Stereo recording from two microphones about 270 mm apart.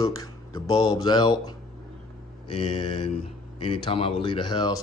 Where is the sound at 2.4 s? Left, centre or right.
Left.